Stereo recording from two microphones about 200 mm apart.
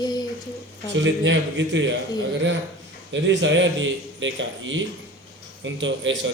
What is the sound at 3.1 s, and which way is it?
A man's voice, 65° right (ahead or behind).